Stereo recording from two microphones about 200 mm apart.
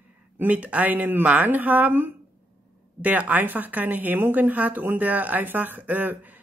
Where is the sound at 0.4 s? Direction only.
10° right (ahead or behind).